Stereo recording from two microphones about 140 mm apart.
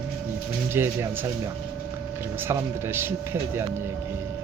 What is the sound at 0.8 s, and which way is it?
Speech, 15° right (ahead or behind).